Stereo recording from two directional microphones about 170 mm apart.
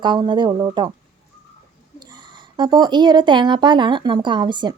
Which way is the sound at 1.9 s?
25° right (ahead or behind).